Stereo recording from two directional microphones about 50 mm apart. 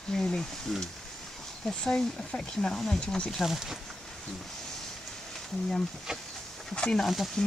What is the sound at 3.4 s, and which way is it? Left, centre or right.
Speech, centre.